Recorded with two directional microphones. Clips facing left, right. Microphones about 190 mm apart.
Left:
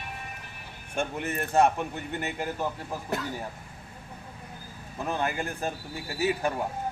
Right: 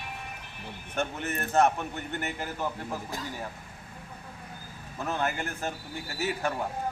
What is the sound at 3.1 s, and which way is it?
Speech, 70° left (ahead or behind).